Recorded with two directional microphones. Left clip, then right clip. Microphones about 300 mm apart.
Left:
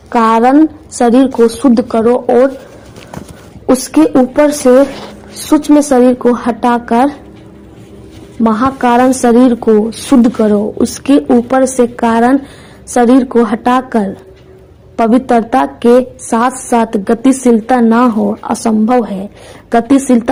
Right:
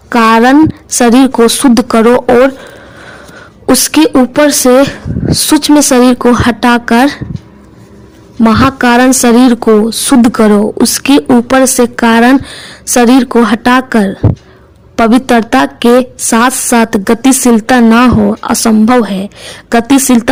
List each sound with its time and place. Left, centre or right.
0.1 s a woman's voice: right
1.7 s speech: right
3.7 s a woman's voice: right
8.4 s a woman's voice: right